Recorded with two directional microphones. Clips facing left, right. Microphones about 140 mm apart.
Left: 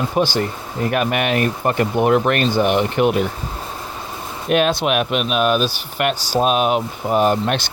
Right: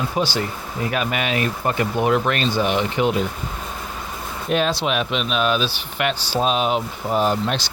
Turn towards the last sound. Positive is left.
turn(degrees=55)  # may be behind; listen again after turning